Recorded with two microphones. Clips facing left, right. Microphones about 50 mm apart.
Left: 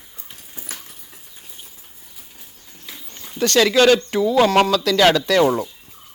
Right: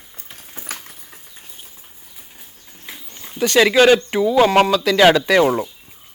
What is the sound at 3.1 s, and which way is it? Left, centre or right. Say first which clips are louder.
A man's voice: right 2 dB; centre.